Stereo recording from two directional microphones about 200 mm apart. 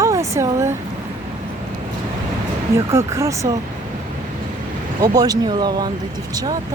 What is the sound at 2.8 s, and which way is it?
Speech, 15° right (ahead or behind).